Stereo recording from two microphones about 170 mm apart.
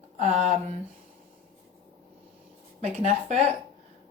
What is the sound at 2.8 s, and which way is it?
Speech, 40° right (ahead or behind).